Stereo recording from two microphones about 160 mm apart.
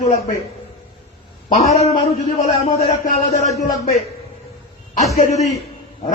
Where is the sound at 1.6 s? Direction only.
40° left (ahead or behind).